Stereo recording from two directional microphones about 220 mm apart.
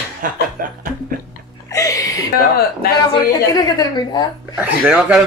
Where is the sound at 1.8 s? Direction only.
15° left (ahead or behind).